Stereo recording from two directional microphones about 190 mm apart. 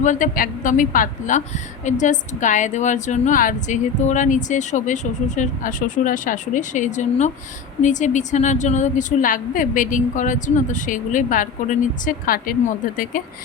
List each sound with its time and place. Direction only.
0.0 s a woman's voice: 40° left (ahead or behind)